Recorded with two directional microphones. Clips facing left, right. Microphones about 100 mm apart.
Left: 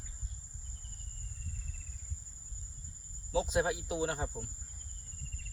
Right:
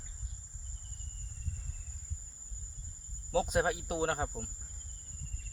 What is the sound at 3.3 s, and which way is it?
Speech, 50° right (ahead or behind).